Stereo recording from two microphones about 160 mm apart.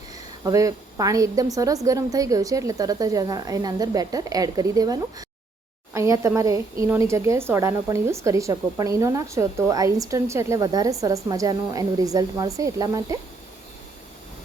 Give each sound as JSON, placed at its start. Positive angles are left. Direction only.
{"t": 0.4, "sound": "a woman's voice", "side_deg": -20}